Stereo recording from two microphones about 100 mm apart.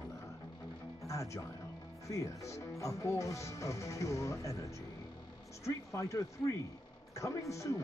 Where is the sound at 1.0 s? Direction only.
30° left (ahead or behind).